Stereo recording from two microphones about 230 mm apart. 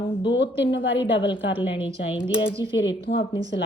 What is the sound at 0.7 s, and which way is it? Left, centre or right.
Speech, left.